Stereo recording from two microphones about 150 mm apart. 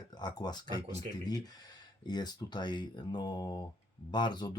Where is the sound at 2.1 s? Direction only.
30° left (ahead or behind).